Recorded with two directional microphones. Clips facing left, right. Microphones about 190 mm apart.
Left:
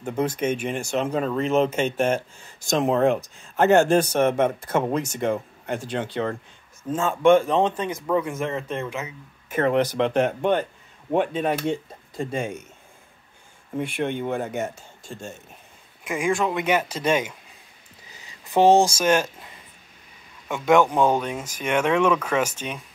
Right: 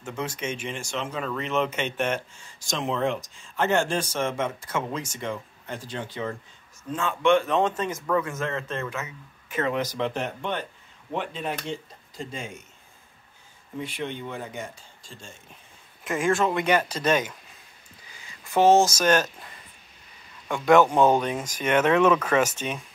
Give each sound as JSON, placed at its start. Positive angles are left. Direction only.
{"t": 0.0, "sound": "speech", "side_deg": 55}
{"t": 4.0, "sound": "speech", "side_deg": 65}
{"t": 6.2, "sound": "speech", "side_deg": 65}
{"t": 6.8, "sound": "speech", "side_deg": 45}
{"t": 7.7, "sound": "speech", "side_deg": 15}
{"t": 9.5, "sound": "speech", "side_deg": 55}
{"t": 13.7, "sound": "speech", "side_deg": 55}
{"t": 16.3, "sound": "speech", "side_deg": 0}
{"t": 20.4, "sound": "speech", "side_deg": 5}